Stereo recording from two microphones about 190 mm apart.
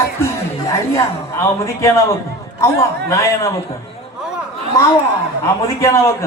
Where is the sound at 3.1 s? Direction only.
15° left (ahead or behind).